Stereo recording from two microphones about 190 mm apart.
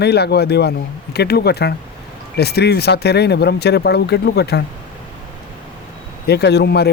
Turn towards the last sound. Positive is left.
turn(degrees=60)  # may be behind; listen again after turning